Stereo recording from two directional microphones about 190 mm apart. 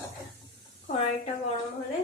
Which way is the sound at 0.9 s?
35° left (ahead or behind).